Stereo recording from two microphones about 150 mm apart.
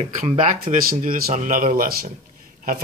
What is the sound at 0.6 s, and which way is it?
Speech, 70° right (ahead or behind).